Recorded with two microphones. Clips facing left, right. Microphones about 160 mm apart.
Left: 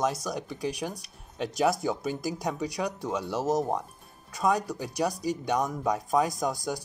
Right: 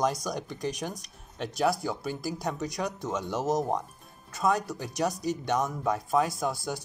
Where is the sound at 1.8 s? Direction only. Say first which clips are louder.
Left 3 dB; 15° left (ahead or behind).